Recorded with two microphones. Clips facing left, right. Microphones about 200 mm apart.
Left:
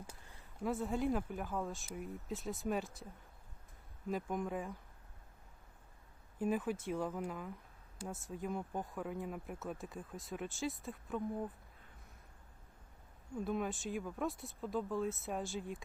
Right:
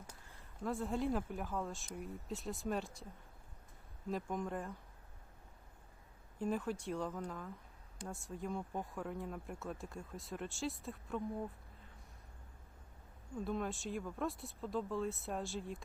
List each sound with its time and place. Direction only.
0.1 s speech: 5° left (ahead or behind)
4.1 s speech: centre (ahead or behind)
6.4 s speech: 5° left (ahead or behind)
13.4 s speech: centre (ahead or behind)